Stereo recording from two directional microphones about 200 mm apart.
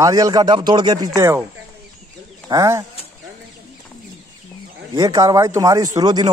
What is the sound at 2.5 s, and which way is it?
Speech, 15° right (ahead or behind).